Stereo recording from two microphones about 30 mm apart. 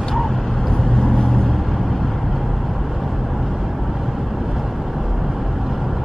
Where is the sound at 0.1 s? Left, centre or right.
Centre.